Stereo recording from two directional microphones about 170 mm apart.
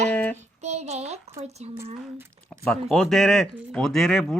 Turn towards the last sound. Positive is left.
turn(degrees=0)  # may be behind; listen again after turning